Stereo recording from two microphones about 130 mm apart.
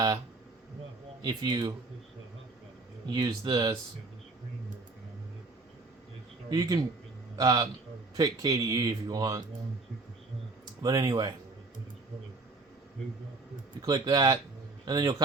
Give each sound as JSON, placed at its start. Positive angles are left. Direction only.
{"t": 1.2, "sound": "speech", "side_deg": -30}
{"t": 3.1, "sound": "speech", "side_deg": -30}
{"t": 6.5, "sound": "speech", "side_deg": -30}
{"t": 10.8, "sound": "speech", "side_deg": -30}
{"t": 13.8, "sound": "a man's voice", "side_deg": -30}